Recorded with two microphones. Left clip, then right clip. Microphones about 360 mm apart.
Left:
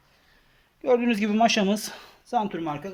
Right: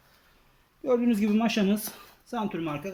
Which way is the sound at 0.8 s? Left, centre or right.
Left.